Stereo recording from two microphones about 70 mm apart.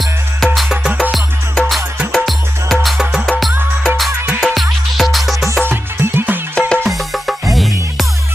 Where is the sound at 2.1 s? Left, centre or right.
Centre.